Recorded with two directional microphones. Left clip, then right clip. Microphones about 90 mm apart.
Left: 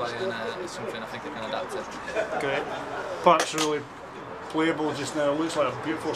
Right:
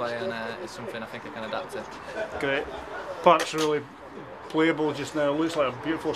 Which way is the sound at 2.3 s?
5° left (ahead or behind).